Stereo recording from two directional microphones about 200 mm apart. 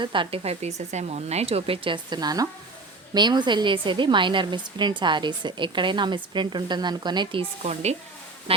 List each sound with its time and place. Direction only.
0.0 s a woman's voice: 25° right (ahead or behind)